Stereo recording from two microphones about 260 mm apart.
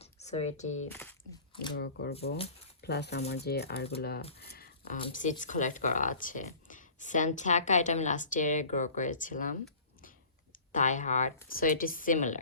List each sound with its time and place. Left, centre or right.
0.0 s speech: left
0.9 s speech: centre
1.8 s speech: left
4.4 s a sound: left
5.0 s speech: left
10.7 s speech: left